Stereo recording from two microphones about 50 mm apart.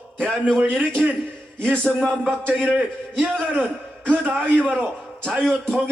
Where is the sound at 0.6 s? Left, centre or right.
Right.